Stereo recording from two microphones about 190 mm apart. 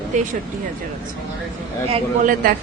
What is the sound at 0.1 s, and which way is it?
Speech, 40° right (ahead or behind).